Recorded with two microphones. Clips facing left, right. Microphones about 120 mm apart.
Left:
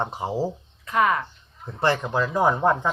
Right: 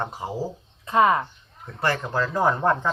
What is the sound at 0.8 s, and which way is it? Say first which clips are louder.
Speech: right 3 dB; 25° right (ahead or behind).